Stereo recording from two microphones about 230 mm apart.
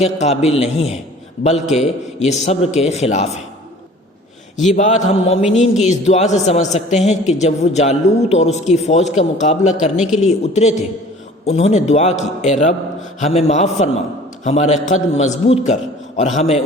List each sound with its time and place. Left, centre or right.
0.0 s a man's voice: left
4.7 s mantra: left
5.5 s a man's voice: left